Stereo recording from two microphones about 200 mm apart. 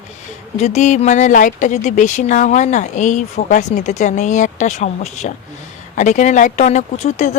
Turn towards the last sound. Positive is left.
turn(degrees=35)  # may be behind; listen again after turning